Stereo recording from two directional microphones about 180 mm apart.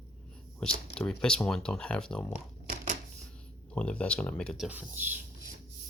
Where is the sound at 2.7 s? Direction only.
45° right (ahead or behind).